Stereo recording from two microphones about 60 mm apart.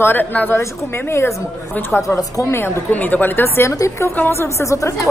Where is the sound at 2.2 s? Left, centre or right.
Left.